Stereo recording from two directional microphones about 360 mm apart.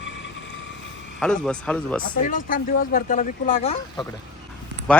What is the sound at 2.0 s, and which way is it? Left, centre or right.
Speech, left.